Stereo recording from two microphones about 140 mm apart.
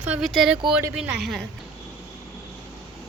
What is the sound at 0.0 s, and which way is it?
Speech, 10° right (ahead or behind).